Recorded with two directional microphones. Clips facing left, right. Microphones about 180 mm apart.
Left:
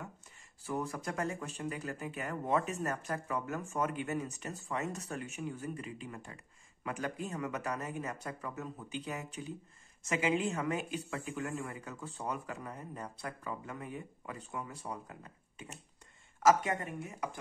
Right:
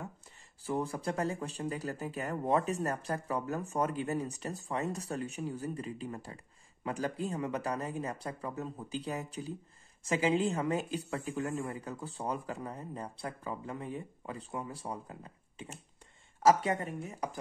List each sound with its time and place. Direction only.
0.7 s speech: 30° right (ahead or behind)